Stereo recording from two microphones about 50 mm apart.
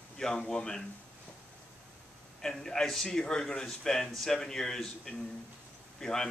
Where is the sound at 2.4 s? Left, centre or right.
Centre.